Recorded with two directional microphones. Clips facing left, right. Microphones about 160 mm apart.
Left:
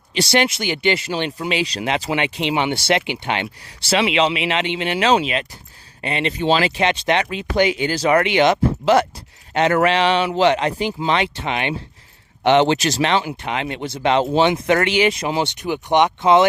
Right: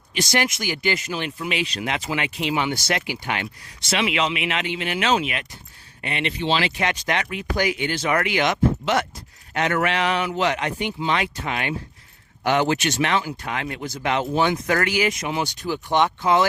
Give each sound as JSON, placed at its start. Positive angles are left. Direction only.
{"t": 0.1, "sound": "speech", "side_deg": 30}
{"t": 6.4, "sound": "speech", "side_deg": 45}
{"t": 6.7, "sound": "speech", "side_deg": 25}